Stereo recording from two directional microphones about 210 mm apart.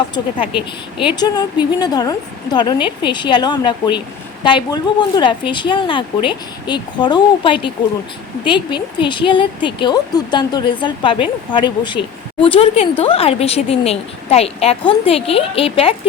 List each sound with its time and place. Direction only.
0.4 s speech: 5° right (ahead or behind)
1.1 s speech: 20° left (ahead or behind)